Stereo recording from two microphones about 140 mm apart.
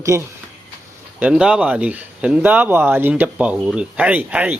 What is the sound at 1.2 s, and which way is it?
Speech, 5° right (ahead or behind).